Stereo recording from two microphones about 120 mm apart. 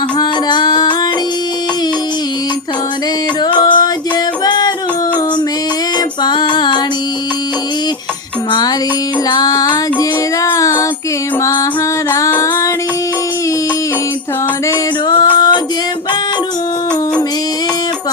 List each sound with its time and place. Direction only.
0.2 s music: 40° left (ahead or behind)
3.4 s a sound: 35° left (ahead or behind)
6.2 s music: 40° left (ahead or behind)
9.3 s music: 35° left (ahead or behind)
12.1 s music: 25° left (ahead or behind)
15.1 s music: 35° left (ahead or behind)